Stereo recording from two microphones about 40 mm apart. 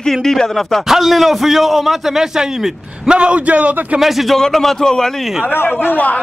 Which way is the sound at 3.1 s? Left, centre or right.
Right.